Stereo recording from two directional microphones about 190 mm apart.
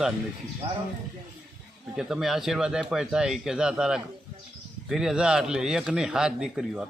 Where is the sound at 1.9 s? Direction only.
5° right (ahead or behind).